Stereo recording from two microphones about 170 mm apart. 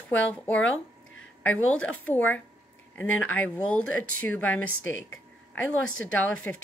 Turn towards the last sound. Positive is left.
turn(degrees=10)  # may be behind; listen again after turning